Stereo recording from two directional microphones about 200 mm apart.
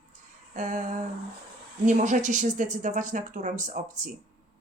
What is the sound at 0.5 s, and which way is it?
Speech, 40° right (ahead or behind).